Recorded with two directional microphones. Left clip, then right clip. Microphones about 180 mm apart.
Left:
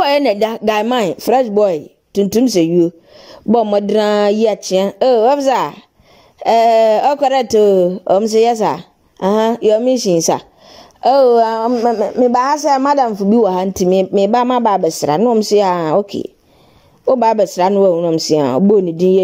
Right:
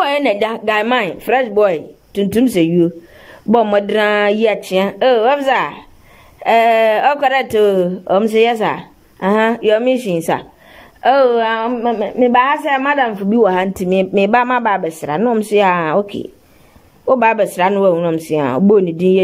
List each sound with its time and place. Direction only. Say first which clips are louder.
0.0 s a woman's voice: left 2 dB; 45° left (ahead or behind)